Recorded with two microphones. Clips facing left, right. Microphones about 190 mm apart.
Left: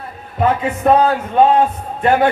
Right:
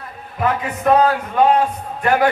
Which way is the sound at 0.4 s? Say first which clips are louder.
Left 4 dB; 25° left (ahead or behind).